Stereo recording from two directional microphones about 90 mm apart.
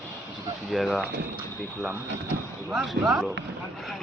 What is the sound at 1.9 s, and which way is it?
Speech, 20° right (ahead or behind).